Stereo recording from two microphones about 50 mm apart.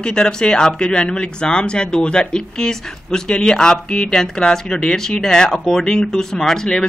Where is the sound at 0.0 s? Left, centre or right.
Centre.